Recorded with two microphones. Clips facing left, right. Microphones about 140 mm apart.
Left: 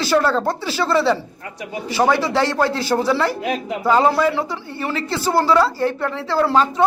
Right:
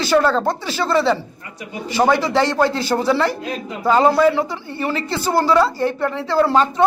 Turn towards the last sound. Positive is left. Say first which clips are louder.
# right 1 dB
turn(degrees=0)  # may be behind; listen again after turning